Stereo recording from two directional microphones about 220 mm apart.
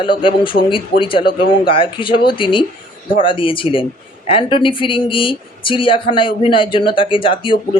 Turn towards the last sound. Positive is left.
turn(degrees=25)  # may be behind; listen again after turning